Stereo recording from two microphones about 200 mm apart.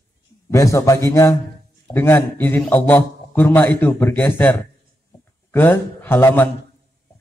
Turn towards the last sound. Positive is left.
turn(degrees=10)  # may be behind; listen again after turning